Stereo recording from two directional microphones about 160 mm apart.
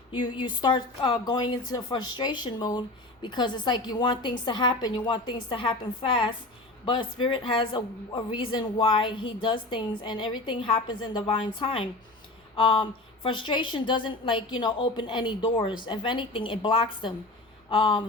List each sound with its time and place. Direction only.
0.4 s a woman's voice: 30° left (ahead or behind)